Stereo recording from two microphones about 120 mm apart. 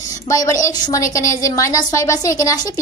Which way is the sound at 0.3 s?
30° left (ahead or behind).